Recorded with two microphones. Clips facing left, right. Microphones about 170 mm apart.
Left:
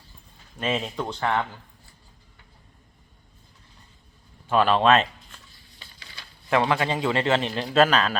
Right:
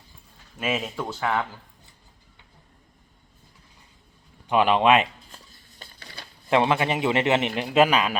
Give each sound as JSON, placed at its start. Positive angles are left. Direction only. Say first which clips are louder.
{"t": 0.5, "sound": "speech", "louder": "left 1 dB", "side_deg": -5}
{"t": 4.4, "sound": "speech", "louder": "even", "side_deg": -15}
{"t": 5.5, "sound": "a sound", "louder": "right 3 dB", "side_deg": -50}
{"t": 6.5, "sound": "a man's voice", "louder": "right 1 dB", "side_deg": -20}